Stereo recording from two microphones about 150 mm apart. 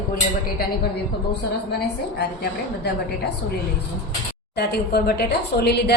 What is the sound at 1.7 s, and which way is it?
A woman's voice, 90° left.